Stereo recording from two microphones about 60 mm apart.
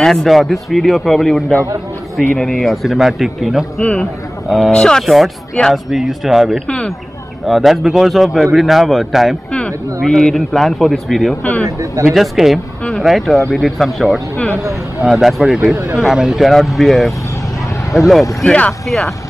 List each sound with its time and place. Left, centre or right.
0.0 s a man's voice: centre
3.8 s a man's voice: centre
4.5 s a man's voice: centre
4.7 s a man's voice: centre
5.0 s a man's voice: centre
9.5 s a sound: centre
10.0 s a man's voice: centre
11.8 s speech: right
12.1 s a man's voice: centre
14.6 s speech: right
15.0 s a man's voice: centre
18.4 s a man's voice: centre
18.7 s a man's voice: centre